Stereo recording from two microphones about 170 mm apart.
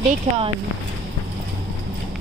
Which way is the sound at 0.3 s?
45° right (ahead or behind).